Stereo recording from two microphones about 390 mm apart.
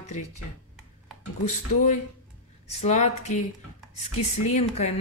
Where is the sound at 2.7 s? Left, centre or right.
Centre.